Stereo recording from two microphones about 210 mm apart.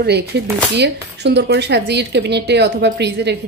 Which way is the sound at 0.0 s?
50° right (ahead or behind).